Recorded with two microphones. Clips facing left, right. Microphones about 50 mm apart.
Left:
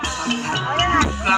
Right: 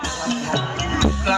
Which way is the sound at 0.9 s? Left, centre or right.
Left.